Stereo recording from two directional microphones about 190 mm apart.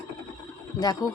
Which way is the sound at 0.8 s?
20° left (ahead or behind).